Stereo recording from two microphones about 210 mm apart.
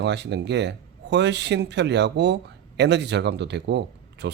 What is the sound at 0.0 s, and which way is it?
Speech, 55° right (ahead or behind).